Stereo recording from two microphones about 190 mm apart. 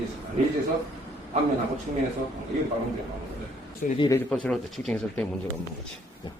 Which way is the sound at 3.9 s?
20° left (ahead or behind).